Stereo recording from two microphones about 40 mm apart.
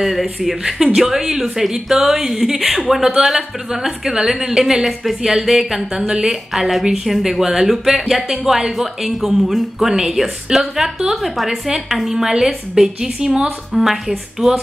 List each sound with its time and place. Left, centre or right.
0.0 s a woman's voice: centre